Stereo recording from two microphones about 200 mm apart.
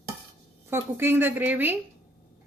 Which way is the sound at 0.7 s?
10° right (ahead or behind).